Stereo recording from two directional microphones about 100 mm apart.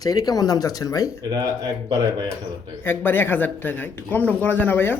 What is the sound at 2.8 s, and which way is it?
Speech, 20° left (ahead or behind).